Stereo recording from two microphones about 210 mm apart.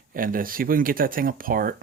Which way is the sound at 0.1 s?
40° right (ahead or behind).